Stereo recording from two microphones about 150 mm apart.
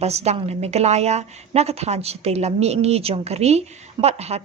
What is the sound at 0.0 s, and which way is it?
A woman's voice, 45° right (ahead or behind).